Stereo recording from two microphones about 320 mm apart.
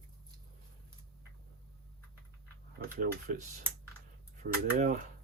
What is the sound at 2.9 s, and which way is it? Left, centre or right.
Speech, right.